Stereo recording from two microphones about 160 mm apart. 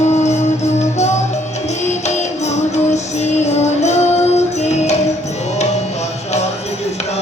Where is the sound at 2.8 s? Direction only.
45° left (ahead or behind).